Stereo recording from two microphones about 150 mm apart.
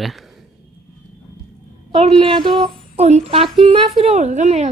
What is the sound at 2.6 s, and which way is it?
Music, 45° right (ahead or behind).